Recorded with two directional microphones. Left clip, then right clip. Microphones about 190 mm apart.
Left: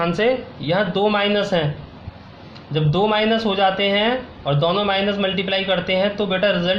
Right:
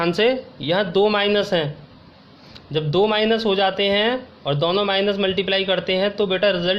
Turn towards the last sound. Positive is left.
turn(degrees=-55)  # may be behind; listen again after turning